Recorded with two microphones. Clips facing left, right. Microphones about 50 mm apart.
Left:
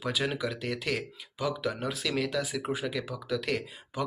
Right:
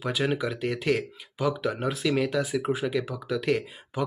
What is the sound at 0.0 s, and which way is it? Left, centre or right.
Speech, right.